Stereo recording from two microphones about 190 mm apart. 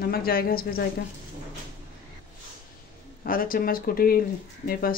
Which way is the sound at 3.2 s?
50° left (ahead or behind).